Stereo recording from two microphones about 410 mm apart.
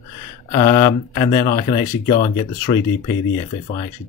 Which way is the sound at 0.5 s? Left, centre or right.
Centre.